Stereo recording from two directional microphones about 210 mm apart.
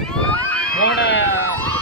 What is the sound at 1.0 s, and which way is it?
Speech, 55° left (ahead or behind).